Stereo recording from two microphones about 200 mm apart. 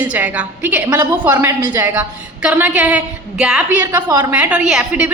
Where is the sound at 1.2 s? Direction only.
10° right (ahead or behind).